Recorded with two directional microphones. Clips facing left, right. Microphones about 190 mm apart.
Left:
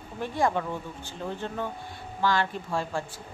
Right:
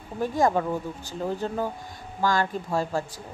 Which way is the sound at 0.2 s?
40° right (ahead or behind).